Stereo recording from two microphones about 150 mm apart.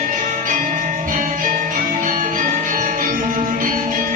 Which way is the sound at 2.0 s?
60° right (ahead or behind).